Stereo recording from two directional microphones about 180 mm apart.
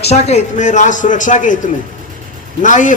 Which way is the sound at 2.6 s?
45° left (ahead or behind).